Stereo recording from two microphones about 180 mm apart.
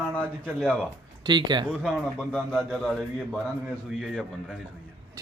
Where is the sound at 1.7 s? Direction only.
5° left (ahead or behind).